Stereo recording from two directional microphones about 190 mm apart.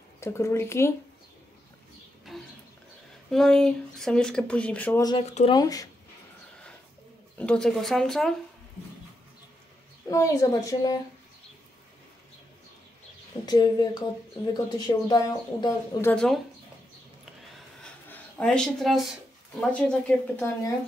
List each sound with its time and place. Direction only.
0.2 s a woman's voice: 15° left (ahead or behind)
3.3 s speech: 5° left (ahead or behind)
5.0 s speech: 30° left (ahead or behind)
5.5 s speech: 20° left (ahead or behind)
7.3 s speech: 5° left (ahead or behind)
10.0 s a woman's voice: 15° left (ahead or behind)
13.5 s speech: 20° left (ahead or behind)
16.1 s speech: 5° left (ahead or behind)
18.0 s speech: 5° left (ahead or behind)